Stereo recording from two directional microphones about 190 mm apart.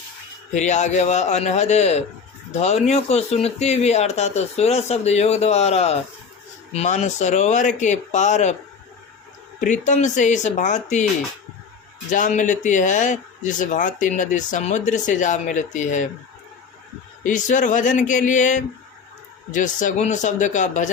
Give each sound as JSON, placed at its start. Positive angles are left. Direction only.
{"t": 0.5, "sound": "speech", "side_deg": 40}
{"t": 9.6, "sound": "speech", "side_deg": 40}
{"t": 12.1, "sound": "speech", "side_deg": 40}
{"t": 17.2, "sound": "speech", "side_deg": 40}